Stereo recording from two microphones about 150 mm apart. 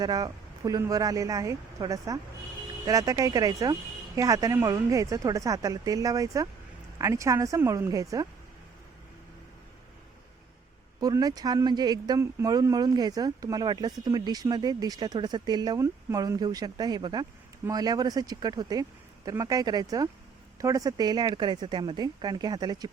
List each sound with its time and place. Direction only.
0.0 s speech: 25° right (ahead or behind)
11.0 s speech: 25° right (ahead or behind)